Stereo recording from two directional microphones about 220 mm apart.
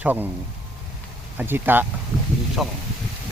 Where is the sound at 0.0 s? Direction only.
10° right (ahead or behind).